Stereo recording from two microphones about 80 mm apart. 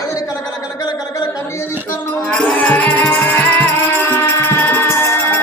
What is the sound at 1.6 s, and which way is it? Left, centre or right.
Music, left.